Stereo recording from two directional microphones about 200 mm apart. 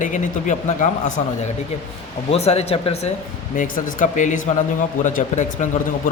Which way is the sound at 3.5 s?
40° left (ahead or behind).